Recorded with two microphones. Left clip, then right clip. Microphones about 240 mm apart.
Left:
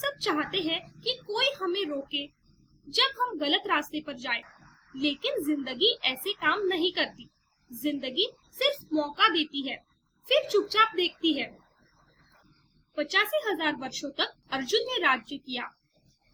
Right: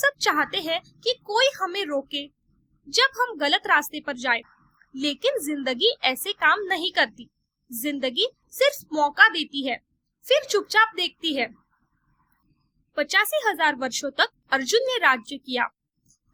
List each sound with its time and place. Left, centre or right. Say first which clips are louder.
0.0 s a woman's voice: right 8 dB; right
12.9 s a woman's voice: right 4 dB; right